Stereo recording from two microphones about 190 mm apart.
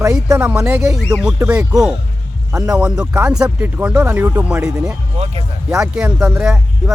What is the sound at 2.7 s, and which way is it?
Speech, 5° right (ahead or behind).